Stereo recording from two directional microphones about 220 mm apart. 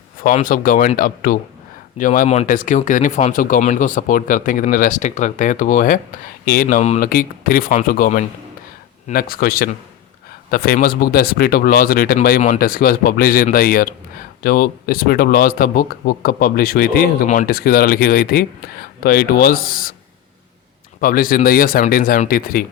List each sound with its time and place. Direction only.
0.2 s speech: 40° left (ahead or behind)
21.0 s speech: 40° left (ahead or behind)